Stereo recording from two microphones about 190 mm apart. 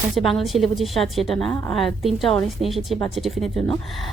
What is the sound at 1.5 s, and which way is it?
Speech, 15° left (ahead or behind).